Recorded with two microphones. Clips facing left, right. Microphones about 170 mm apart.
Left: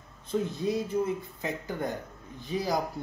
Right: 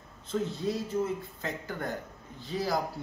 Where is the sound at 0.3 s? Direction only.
15° left (ahead or behind).